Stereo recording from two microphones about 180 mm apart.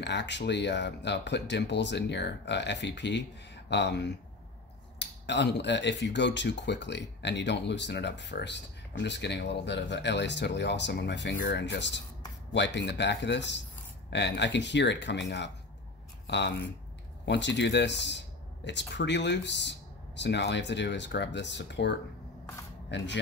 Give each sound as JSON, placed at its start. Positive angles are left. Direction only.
{"t": 0.0, "sound": "speech", "side_deg": 75}